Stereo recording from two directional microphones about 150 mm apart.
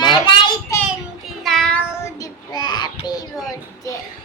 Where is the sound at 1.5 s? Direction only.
5° left (ahead or behind); by 3.2 s 25° left (ahead or behind).